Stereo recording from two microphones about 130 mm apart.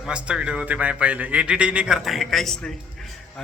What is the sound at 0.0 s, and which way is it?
A man's voice, 10° right (ahead or behind).